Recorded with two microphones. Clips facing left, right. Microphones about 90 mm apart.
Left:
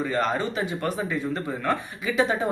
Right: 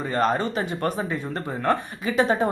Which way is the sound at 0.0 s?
40° right (ahead or behind).